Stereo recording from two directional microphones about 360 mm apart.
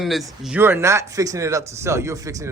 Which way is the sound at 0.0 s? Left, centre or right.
Centre.